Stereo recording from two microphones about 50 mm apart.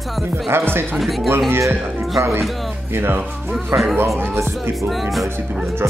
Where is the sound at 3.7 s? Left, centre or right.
Right.